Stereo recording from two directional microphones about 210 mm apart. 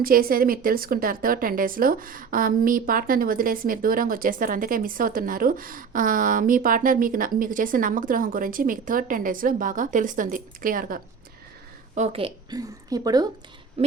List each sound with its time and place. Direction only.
0.0 s a woman's voice: 45° right (ahead or behind)
11.9 s a woman's voice: 30° right (ahead or behind)
13.8 s a woman's voice: 30° right (ahead or behind)